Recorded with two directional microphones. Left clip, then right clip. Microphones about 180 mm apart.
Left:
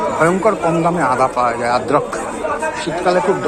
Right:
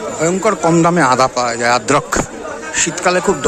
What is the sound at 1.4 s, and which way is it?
Speech, 75° right (ahead or behind).